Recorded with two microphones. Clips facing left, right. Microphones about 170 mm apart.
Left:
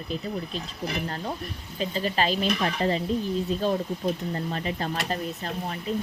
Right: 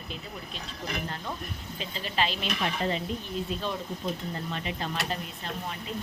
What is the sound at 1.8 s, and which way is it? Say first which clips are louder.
Speech: left 5 dB; 40° left (ahead or behind).